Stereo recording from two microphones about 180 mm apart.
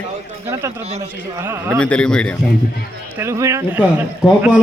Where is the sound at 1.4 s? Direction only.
15° right (ahead or behind).